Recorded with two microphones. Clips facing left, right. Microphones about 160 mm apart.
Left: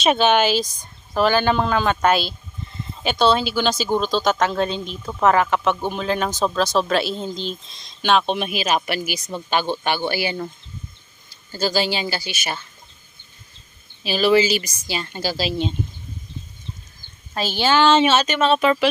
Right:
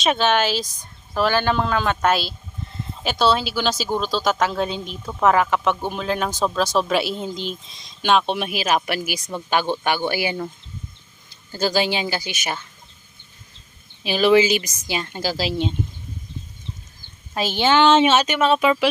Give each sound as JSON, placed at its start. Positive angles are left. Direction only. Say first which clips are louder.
{"t": 0.0, "sound": "speech", "louder": "left 2 dB", "side_deg": 0}
{"t": 11.5, "sound": "speech", "louder": "right 1 dB", "side_deg": -15}
{"t": 14.0, "sound": "speech", "louder": "right 1 dB", "side_deg": -15}
{"t": 17.3, "sound": "speech", "louder": "right 1 dB", "side_deg": -20}